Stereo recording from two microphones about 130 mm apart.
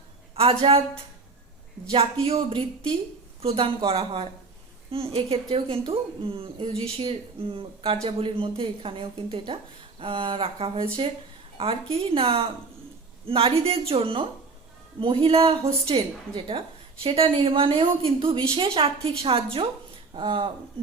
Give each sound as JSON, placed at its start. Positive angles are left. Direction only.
{"t": 0.3, "sound": "a woman's voice", "side_deg": -45}